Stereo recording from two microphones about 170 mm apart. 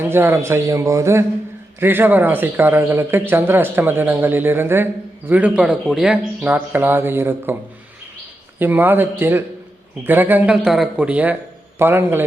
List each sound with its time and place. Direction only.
0.0 s speech: 15° right (ahead or behind)
8.5 s speech: 10° right (ahead or behind)